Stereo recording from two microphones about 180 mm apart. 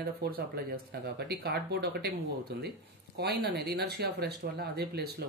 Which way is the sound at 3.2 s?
60° right (ahead or behind).